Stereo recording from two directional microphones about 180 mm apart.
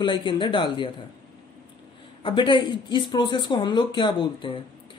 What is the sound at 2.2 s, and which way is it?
Speech, 25° left (ahead or behind).